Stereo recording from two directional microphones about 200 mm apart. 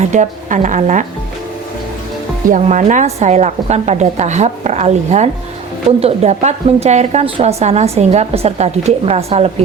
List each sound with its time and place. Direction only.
0.0 s a woman's voice: 35° right (ahead or behind)
2.5 s a woman's voice: 35° right (ahead or behind)